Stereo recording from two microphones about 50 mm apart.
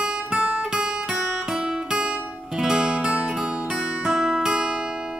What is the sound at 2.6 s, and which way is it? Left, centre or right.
Music, centre.